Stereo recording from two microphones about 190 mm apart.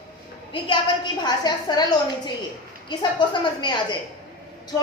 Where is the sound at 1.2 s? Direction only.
20° left (ahead or behind).